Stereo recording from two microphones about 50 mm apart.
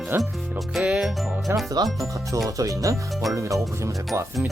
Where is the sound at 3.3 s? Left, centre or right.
Right.